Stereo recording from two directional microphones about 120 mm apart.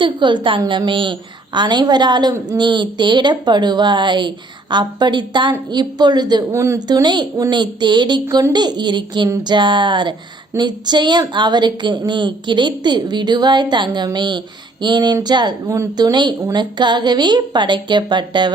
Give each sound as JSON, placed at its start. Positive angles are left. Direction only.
{"t": 0.0, "sound": "a woman's voice", "side_deg": -40}
{"t": 6.5, "sound": "a woman's voice", "side_deg": -20}
{"t": 6.7, "sound": "a woman's voice", "side_deg": -35}